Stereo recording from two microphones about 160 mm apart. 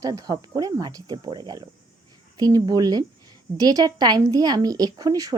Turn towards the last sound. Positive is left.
turn(degrees=-25)  # may be behind; listen again after turning